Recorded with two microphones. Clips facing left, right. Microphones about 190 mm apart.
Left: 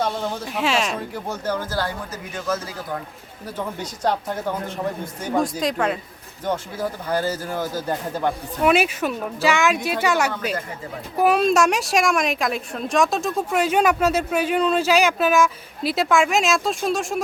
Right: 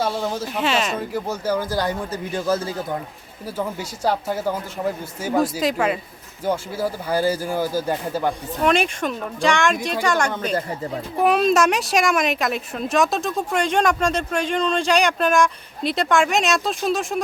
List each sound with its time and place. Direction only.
0.0 s a woman's voice: 5° right (ahead or behind)
2.1 s speech: 30° right (ahead or behind)
3.4 s a woman's voice: 5° right (ahead or behind)
8.6 s a woman's voice: 5° left (ahead or behind)